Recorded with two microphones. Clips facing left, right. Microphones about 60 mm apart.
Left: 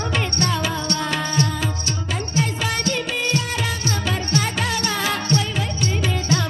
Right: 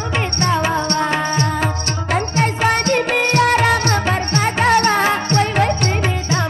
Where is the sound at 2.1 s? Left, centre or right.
Right.